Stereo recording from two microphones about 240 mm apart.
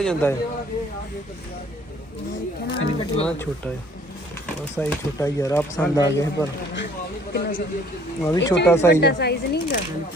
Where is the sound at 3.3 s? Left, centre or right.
Centre.